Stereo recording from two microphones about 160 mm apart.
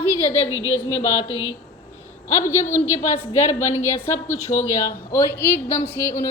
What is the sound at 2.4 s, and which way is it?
A woman's voice, 15° left (ahead or behind).